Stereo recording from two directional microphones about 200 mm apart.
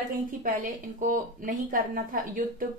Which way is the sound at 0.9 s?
40° right (ahead or behind).